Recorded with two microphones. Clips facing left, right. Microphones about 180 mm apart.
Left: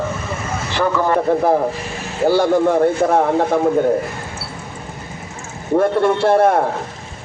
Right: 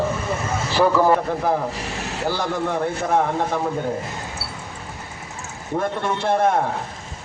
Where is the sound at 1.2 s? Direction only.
45° left (ahead or behind).